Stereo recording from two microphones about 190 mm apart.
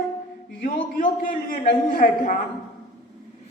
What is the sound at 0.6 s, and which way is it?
A man's voice, 50° left (ahead or behind).